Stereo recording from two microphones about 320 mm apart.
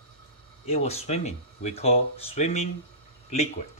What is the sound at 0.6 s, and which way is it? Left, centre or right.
Speech, centre.